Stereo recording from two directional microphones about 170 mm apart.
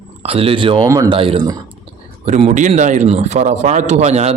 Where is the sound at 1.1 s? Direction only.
35° right (ahead or behind).